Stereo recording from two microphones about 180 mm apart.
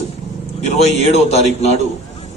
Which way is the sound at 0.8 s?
35° left (ahead or behind).